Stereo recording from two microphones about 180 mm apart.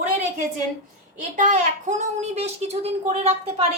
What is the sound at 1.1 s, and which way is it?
A woman's voice, 45° right (ahead or behind).